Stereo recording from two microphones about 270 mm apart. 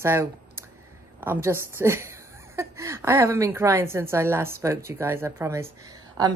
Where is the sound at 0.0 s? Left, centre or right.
Centre.